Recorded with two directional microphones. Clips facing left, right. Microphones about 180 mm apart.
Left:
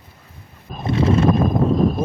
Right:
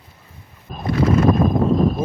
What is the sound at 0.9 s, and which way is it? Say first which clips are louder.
Horse: right 1 dB; 25° left (ahead or behind).